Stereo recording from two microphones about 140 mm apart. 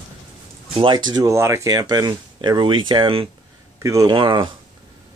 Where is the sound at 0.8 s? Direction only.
30° right (ahead or behind).